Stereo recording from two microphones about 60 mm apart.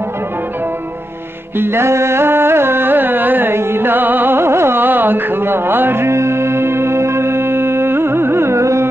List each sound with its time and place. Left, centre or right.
1.6 s carnatic music: right